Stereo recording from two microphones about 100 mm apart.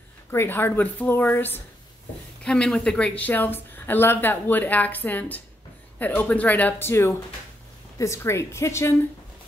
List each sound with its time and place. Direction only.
0.3 s speech: 25° left (ahead or behind)
2.4 s speech: 5° left (ahead or behind); by 8.9 s 30° left (ahead or behind)